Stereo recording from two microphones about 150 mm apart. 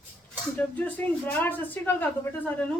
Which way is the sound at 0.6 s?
10° left (ahead or behind).